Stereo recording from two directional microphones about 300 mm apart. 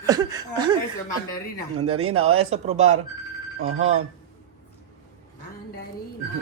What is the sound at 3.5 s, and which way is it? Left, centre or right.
Speech, right.